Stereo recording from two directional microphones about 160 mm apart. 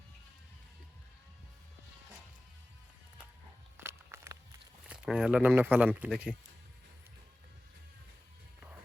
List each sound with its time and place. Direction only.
3.8 s walk: 15° right (ahead or behind)
4.8 s speech: 5° right (ahead or behind)